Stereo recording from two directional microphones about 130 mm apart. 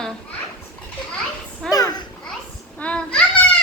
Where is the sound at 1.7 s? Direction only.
30° left (ahead or behind).